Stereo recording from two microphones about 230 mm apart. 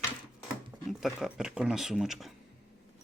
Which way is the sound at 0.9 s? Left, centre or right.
Centre.